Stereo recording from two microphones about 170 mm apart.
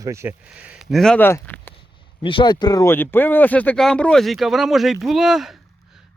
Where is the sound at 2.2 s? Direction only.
30° left (ahead or behind); by 5.5 s centre (ahead or behind).